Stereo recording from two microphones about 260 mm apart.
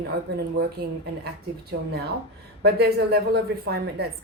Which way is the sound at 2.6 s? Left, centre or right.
Right.